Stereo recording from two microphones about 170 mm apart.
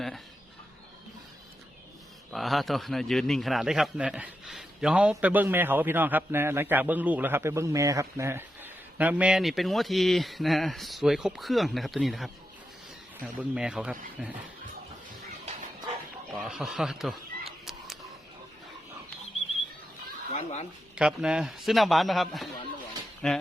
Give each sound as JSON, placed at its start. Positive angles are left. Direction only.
{"t": 2.3, "sound": "a man's voice", "side_deg": 0}
{"t": 16.5, "sound": "a sound", "side_deg": 0}
{"t": 20.3, "sound": "speech", "side_deg": 40}
{"t": 20.9, "sound": "a man's voice", "side_deg": -5}